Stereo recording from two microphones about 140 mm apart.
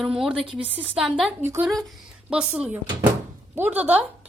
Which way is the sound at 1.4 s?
15° right (ahead or behind).